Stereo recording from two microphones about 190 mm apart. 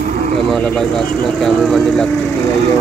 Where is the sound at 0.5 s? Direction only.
5° left (ahead or behind).